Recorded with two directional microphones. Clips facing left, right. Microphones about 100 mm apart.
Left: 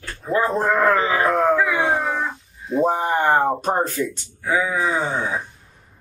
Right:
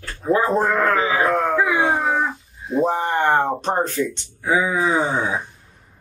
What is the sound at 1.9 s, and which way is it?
Wail, centre (ahead or behind).